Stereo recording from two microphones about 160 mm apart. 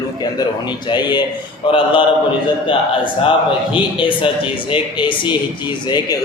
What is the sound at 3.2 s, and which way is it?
A man's voice, 30° left (ahead or behind).